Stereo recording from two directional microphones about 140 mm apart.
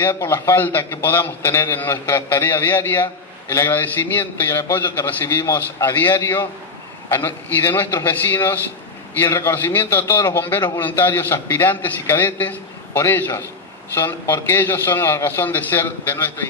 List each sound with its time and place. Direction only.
0.0 s a man's voice: 20° left (ahead or behind)